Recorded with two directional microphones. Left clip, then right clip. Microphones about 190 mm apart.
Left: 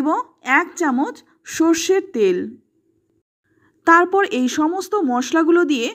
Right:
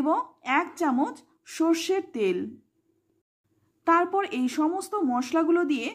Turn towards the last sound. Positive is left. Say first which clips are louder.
# left 8 dB
turn(degrees=25)  # may be behind; listen again after turning